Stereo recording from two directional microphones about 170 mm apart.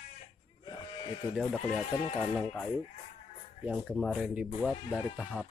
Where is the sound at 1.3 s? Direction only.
Centre (ahead or behind).